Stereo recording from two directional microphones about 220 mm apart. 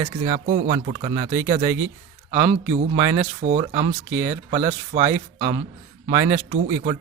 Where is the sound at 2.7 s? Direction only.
30° right (ahead or behind).